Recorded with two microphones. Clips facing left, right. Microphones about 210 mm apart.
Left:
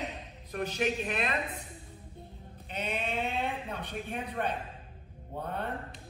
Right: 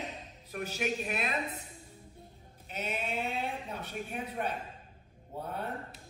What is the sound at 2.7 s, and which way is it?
Speech, 5° right (ahead or behind).